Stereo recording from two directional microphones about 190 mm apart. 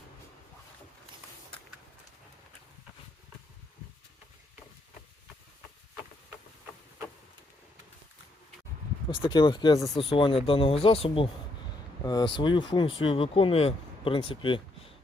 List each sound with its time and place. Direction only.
9.0 s speech: 25° left (ahead or behind)